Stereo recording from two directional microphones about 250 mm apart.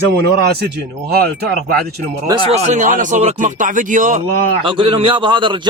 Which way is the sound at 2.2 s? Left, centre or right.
Right.